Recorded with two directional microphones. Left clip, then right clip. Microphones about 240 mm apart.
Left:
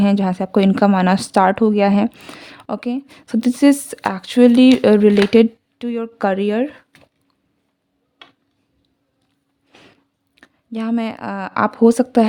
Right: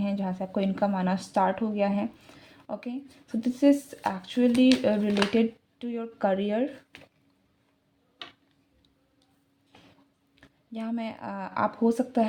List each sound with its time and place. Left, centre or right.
0.0 s a woman's voice: left
10.3 s speech: left